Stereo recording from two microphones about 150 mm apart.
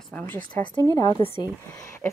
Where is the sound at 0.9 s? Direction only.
25° left (ahead or behind).